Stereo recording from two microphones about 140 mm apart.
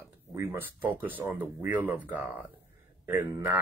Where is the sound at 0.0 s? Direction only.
20° right (ahead or behind).